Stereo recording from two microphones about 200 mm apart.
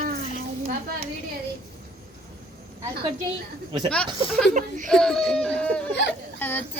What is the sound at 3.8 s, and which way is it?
A woman's voice, 5° left (ahead or behind).